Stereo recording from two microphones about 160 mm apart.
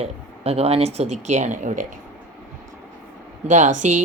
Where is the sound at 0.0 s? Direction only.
40° right (ahead or behind).